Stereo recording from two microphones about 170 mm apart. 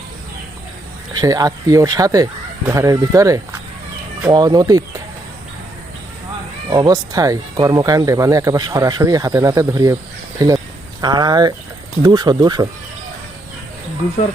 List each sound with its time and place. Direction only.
1.1 s speech: 20° right (ahead or behind)
6.7 s speech: 20° right (ahead or behind)